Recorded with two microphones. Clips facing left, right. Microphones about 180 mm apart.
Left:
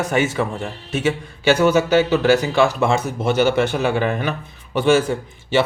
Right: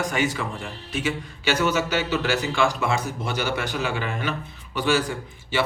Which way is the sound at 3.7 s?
55° left (ahead or behind).